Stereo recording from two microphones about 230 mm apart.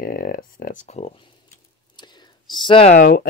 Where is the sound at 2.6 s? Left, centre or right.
Left.